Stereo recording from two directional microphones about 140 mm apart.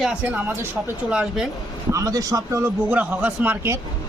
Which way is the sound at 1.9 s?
25° right (ahead or behind).